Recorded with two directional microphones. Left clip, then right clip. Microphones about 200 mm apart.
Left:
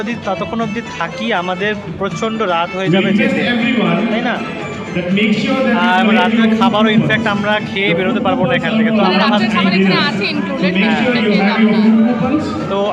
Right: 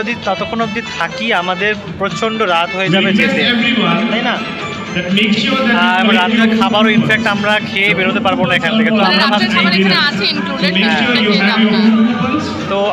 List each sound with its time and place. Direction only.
2.2 s a man's voice: 5° right (ahead or behind)
3.2 s a man's voice: 45° left (ahead or behind)
5.1 s a man's voice: 45° left (ahead or behind)
5.7 s a man's voice: 5° right (ahead or behind)
9.0 s speech: 10° left (ahead or behind)